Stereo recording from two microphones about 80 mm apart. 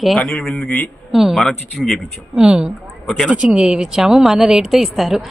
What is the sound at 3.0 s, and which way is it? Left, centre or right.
Speech, centre.